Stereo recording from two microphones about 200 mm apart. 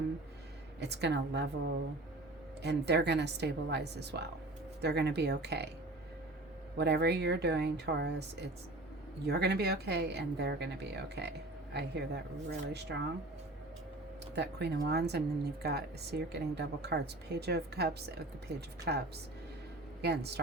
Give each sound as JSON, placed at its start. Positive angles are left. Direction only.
{"t": 0.8, "sound": "speech", "side_deg": -55}
{"t": 6.7, "sound": "speech", "side_deg": -55}
{"t": 14.3, "sound": "speech", "side_deg": -55}